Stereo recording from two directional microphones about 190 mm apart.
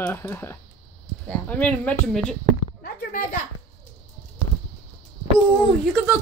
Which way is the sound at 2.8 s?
45° left (ahead or behind).